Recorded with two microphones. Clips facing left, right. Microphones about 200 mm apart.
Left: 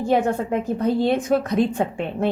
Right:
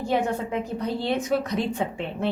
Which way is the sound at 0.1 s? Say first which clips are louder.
Left 5 dB; 50° left (ahead or behind).